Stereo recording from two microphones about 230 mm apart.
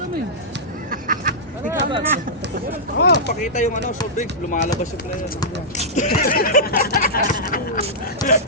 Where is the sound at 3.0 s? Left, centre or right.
Left.